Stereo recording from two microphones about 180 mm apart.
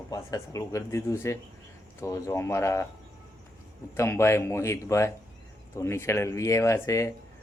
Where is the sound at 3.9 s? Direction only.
15° left (ahead or behind).